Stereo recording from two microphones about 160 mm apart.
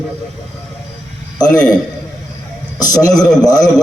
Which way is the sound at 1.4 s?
25° left (ahead or behind).